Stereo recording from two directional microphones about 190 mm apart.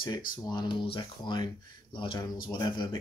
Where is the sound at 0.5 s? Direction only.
25° left (ahead or behind).